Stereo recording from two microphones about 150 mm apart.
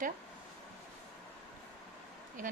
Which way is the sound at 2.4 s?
65° right (ahead or behind).